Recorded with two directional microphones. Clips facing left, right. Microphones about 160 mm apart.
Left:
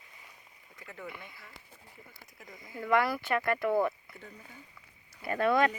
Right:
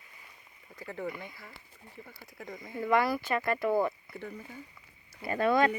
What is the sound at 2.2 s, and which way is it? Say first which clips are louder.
Speech: right 9 dB; 55° right (ahead or behind).